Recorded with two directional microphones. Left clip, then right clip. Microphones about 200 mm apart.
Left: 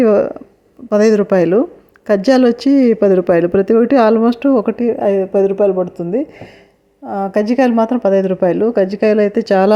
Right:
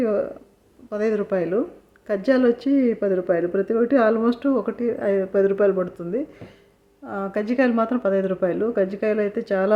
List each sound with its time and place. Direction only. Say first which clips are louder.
0.0 s speech: left 11 dB; 40° left (ahead or behind)